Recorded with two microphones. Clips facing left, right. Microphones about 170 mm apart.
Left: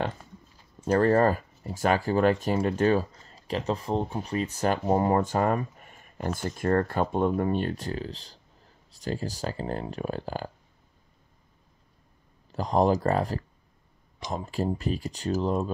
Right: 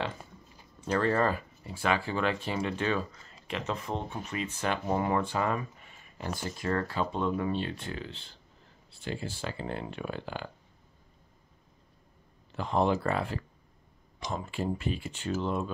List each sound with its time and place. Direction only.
0.8 s speech: 45° left (ahead or behind)
12.5 s speech: 40° left (ahead or behind)